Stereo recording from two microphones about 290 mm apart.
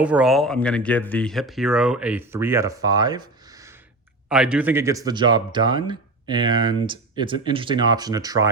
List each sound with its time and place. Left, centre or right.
0.0 s speech: centre